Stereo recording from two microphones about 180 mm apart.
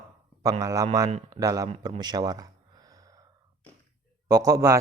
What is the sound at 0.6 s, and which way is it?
Speech, 20° right (ahead or behind).